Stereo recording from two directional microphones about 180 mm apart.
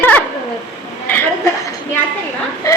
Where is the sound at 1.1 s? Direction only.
10° left (ahead or behind).